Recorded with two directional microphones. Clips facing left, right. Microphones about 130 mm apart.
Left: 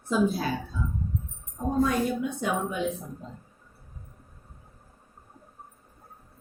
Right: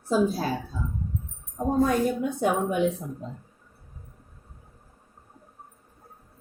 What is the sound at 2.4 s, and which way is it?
Speech, 60° right (ahead or behind).